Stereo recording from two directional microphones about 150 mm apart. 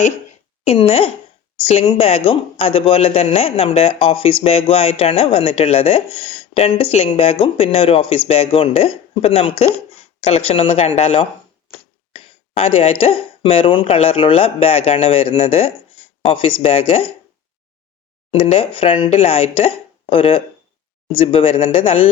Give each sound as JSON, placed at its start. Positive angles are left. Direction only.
{"t": 0.6, "sound": "speech", "side_deg": 40}
{"t": 18.3, "sound": "speech", "side_deg": 40}